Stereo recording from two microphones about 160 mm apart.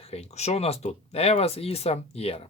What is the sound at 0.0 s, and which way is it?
Speech, 40° left (ahead or behind).